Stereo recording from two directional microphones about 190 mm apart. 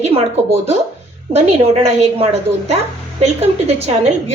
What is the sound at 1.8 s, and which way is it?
A woman's voice, 35° right (ahead or behind).